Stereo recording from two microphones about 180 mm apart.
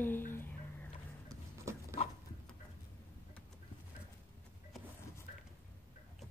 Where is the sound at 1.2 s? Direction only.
15° right (ahead or behind).